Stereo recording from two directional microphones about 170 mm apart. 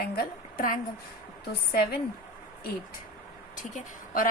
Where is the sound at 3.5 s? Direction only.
50° left (ahead or behind).